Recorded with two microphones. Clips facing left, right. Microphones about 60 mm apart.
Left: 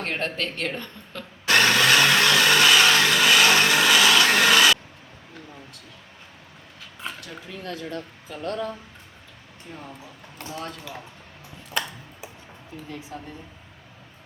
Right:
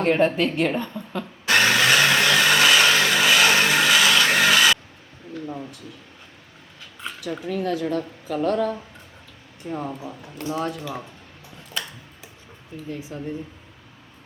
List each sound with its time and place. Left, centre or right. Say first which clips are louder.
0.0 s speech: right 9 dB; centre
0.8 s blender: right 8 dB; centre
7.4 s speech: right 10 dB; right
8.3 s speech: right 7 dB; right
9.7 s speech: right 11 dB; right
10.4 s speech: right 8 dB; centre